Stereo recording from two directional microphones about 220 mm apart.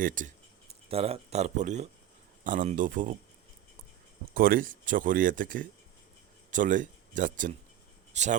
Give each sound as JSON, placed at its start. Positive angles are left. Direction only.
{"t": 0.0, "sound": "speech", "side_deg": -35}
{"t": 4.4, "sound": "speech", "side_deg": -40}